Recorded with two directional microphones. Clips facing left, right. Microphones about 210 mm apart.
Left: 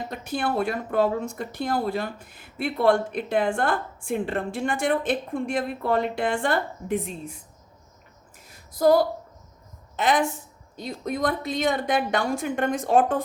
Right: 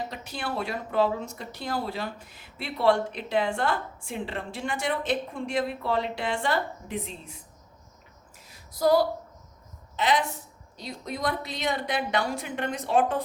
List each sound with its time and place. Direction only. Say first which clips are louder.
0.1 s speech: left 7 dB; 50° left (ahead or behind)
8.4 s a sound: left 4 dB; 50° left (ahead or behind)
9.9 s a woman's voice: left 3 dB; 50° left (ahead or behind)